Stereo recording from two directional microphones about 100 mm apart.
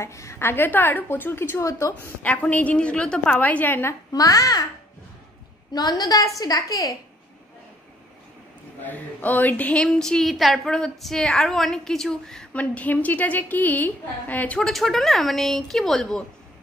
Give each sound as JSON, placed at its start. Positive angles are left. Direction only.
{"t": 0.0, "sound": "a woman's voice", "side_deg": 30}
{"t": 2.2, "sound": "a woman's voice", "side_deg": 15}
{"t": 4.1, "sound": "a woman's voice", "side_deg": 35}
{"t": 5.7, "sound": "a woman's voice", "side_deg": 40}
{"t": 8.8, "sound": "a woman's voice", "side_deg": 15}
{"t": 14.6, "sound": "a woman's voice", "side_deg": 0}